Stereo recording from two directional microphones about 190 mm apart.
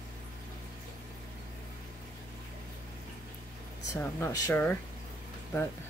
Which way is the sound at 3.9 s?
15° left (ahead or behind).